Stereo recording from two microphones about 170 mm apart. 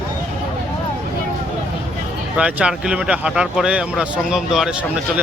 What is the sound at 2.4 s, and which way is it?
Speech, 5° right (ahead or behind).